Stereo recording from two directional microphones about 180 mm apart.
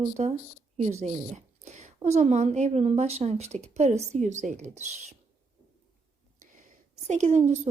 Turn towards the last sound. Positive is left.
turn(degrees=-40)  # may be behind; listen again after turning